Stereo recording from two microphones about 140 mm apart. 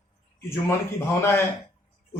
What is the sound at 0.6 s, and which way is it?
Speech, 20° left (ahead or behind).